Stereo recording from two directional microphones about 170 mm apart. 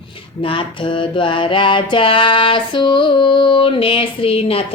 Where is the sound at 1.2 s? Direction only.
30° left (ahead or behind).